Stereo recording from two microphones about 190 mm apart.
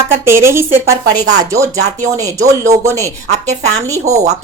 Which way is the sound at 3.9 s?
35° right (ahead or behind).